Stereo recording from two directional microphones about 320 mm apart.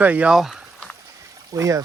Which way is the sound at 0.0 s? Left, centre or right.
Centre.